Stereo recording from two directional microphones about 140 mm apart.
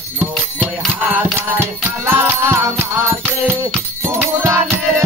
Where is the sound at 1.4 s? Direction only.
15° right (ahead or behind).